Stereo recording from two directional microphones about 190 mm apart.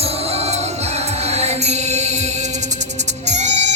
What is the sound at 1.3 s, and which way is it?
Mantra, 35° right (ahead or behind).